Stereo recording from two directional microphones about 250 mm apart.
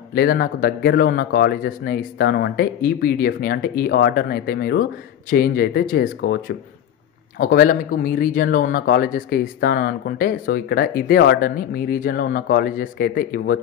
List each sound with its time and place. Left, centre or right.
0.1 s speech: left